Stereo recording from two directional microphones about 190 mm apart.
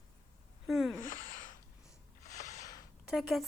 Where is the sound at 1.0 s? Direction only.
45° left (ahead or behind).